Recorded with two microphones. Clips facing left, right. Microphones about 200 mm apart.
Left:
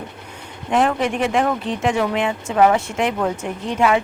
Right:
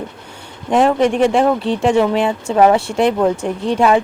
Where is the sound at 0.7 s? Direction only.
30° right (ahead or behind).